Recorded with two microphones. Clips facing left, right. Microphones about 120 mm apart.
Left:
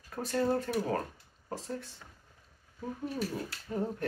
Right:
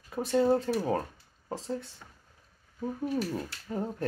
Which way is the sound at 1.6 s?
25° right (ahead or behind).